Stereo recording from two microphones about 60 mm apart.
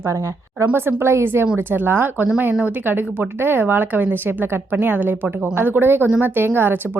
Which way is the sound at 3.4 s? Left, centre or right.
Right.